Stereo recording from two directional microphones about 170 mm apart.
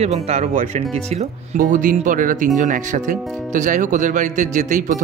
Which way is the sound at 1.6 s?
50° right (ahead or behind).